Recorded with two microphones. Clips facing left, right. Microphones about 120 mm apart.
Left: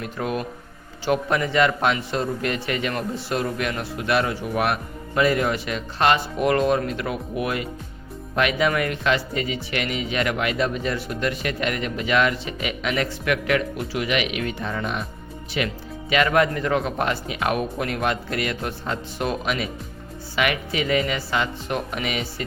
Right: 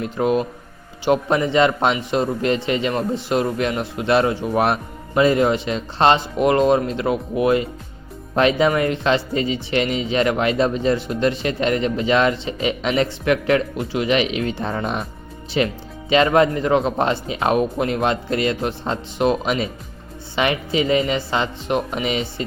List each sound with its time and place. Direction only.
0.0 s speech: 20° right (ahead or behind)